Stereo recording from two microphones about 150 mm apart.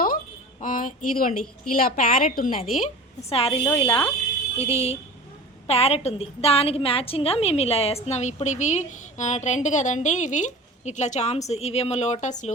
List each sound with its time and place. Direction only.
0.6 s a woman's voice: 60° left (ahead or behind)
3.2 s a woman's voice: 40° left (ahead or behind)